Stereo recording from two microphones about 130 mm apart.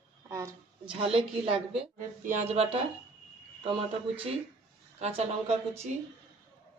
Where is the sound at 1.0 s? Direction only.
45° right (ahead or behind).